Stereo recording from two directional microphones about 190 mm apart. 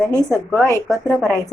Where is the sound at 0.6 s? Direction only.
15° left (ahead or behind).